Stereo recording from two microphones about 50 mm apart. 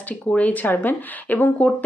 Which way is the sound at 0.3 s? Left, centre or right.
Left.